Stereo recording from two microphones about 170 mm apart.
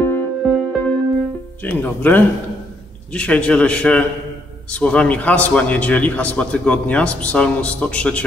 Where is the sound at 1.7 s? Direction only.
10° left (ahead or behind).